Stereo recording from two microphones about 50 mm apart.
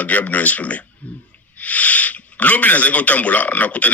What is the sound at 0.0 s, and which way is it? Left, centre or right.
Speech, left.